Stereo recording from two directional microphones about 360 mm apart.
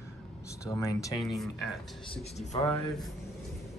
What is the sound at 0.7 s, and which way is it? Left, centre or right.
Speech, centre.